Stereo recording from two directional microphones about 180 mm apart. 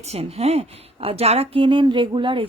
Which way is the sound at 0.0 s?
35° right (ahead or behind).